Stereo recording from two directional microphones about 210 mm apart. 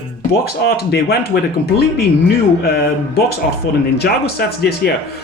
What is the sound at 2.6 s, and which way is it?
Speech, 50° left (ahead or behind).